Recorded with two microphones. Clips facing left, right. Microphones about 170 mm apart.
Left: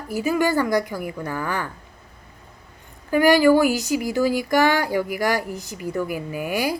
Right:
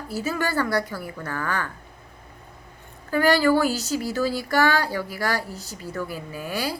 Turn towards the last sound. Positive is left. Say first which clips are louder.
# left 5 dB
turn(degrees=15)  # may be behind; listen again after turning